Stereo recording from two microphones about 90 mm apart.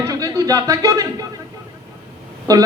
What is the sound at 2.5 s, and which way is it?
Speech, 40° right (ahead or behind).